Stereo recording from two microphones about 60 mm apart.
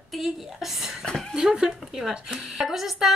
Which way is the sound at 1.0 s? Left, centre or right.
Centre.